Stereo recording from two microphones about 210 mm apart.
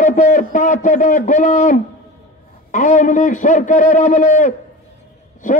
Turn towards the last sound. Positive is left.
turn(degrees=35)  # may be behind; listen again after turning